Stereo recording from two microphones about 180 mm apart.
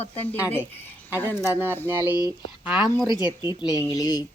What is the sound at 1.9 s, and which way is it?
Speech, 15° right (ahead or behind).